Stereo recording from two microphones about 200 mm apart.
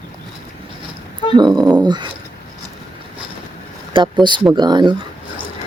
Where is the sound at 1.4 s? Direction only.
20° right (ahead or behind).